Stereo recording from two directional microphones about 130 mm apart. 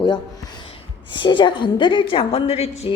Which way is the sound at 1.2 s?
35° left (ahead or behind).